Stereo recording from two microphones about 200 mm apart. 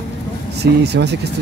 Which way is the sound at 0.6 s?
55° right (ahead or behind).